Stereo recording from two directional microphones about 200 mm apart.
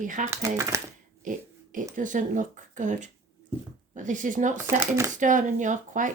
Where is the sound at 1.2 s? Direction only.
40° right (ahead or behind).